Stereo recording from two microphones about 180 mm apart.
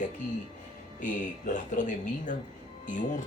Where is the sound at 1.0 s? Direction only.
45° left (ahead or behind).